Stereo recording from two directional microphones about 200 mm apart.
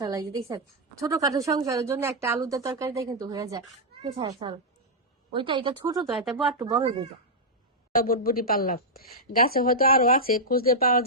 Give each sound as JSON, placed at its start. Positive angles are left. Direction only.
{"t": 0.0, "sound": "a woman's voice", "side_deg": -15}
{"t": 6.1, "sound": "speech", "side_deg": 0}
{"t": 6.6, "sound": "a woman's voice", "side_deg": -20}
{"t": 7.9, "sound": "speech", "side_deg": 45}